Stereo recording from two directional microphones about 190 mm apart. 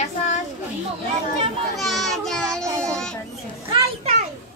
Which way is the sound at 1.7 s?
Centre (ahead or behind).